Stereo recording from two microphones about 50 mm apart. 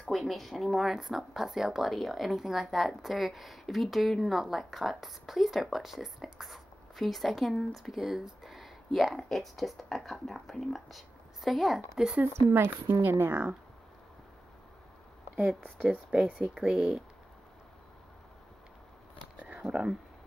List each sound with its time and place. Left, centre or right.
0.1 s a woman's voice: centre
12.3 s speech: right
16.1 s speech: centre
19.3 s a sound: right
19.7 s speech: centre